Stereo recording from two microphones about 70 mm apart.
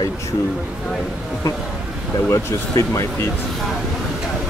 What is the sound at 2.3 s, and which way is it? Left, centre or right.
Speech, left.